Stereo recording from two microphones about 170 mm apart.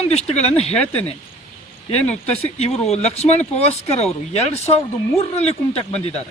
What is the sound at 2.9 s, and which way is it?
Speech, 40° left (ahead or behind).